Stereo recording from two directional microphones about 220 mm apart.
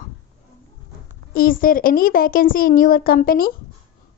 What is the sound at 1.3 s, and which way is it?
A woman's voice, 40° left (ahead or behind).